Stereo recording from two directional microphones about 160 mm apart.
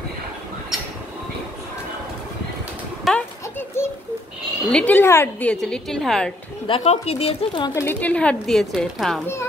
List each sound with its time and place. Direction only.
3.1 s a sound: 10° left (ahead or behind)
4.6 s a woman's voice: 10° left (ahead or behind)
6.7 s speech: 40° left (ahead or behind)
7.7 s speech: 15° left (ahead or behind)